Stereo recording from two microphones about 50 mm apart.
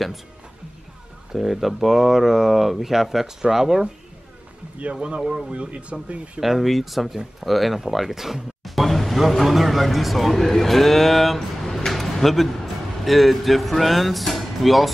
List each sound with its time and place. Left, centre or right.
1.3 s speech: centre
5.0 s speech: centre
6.4 s speech: centre